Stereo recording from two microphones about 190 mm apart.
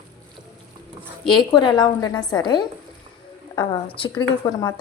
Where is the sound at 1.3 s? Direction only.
25° left (ahead or behind).